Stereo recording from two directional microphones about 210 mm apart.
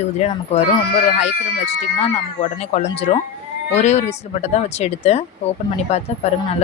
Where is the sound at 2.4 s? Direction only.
30° left (ahead or behind).